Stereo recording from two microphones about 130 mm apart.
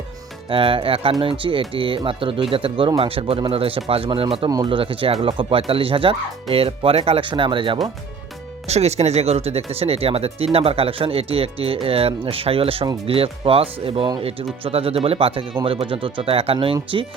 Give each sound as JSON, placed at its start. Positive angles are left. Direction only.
{"t": 0.5, "sound": "speech", "side_deg": -45}
{"t": 4.4, "sound": "speech", "side_deg": -30}
{"t": 4.8, "sound": "speech", "side_deg": -45}
{"t": 8.6, "sound": "speech", "side_deg": -55}